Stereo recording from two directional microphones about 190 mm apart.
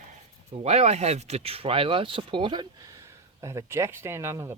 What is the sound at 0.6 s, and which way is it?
Speech, 35° right (ahead or behind).